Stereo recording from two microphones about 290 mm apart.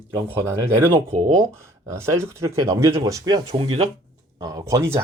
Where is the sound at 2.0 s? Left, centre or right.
Centre.